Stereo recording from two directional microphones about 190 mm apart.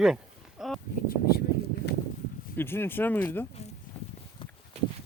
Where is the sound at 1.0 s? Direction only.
50° left (ahead or behind).